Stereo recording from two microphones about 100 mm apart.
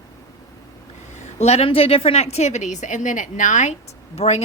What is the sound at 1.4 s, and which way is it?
A woman's voice, 90° left.